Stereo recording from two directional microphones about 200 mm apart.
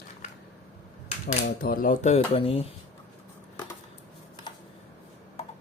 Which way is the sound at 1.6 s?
45° left (ahead or behind).